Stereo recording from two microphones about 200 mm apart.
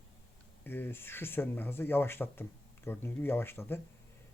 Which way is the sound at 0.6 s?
10° left (ahead or behind).